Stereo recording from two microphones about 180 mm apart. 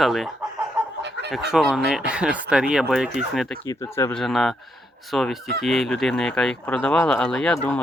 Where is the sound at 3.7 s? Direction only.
15° left (ahead or behind).